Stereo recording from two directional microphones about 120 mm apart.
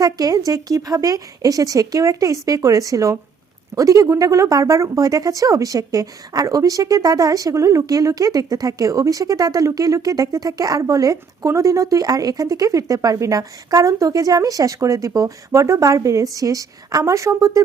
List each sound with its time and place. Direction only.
0.0 s speech: 30° right (ahead or behind)